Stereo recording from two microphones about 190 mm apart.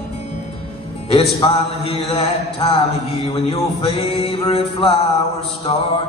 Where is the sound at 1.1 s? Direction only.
30° left (ahead or behind).